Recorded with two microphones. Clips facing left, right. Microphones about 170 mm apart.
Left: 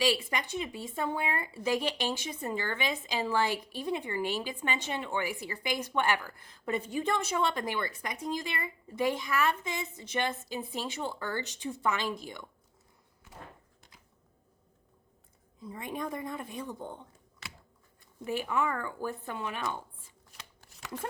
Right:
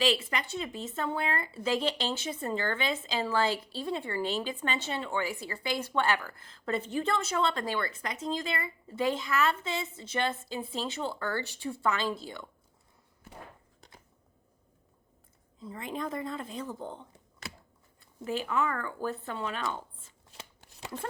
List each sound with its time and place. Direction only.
0.0 s speech: 15° left (ahead or behind)
15.6 s speech: 15° left (ahead or behind)
18.3 s speech: 15° left (ahead or behind)
20.3 s shuffling cards: 25° right (ahead or behind)